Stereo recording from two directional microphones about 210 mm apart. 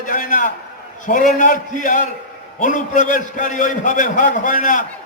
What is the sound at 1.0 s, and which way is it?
Speech, 40° left (ahead or behind).